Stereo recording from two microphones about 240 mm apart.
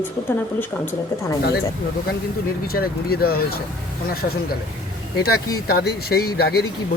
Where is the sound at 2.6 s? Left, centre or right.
Left.